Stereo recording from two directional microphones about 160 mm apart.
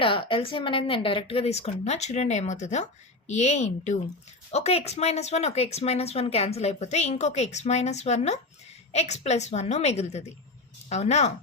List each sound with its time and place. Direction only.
0.0 s a woman's voice: 30° left (ahead or behind)